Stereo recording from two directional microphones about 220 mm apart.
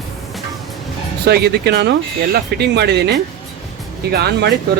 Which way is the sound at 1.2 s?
45° right (ahead or behind).